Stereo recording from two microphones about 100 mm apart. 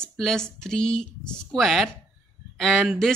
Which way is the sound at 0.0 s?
5° left (ahead or behind).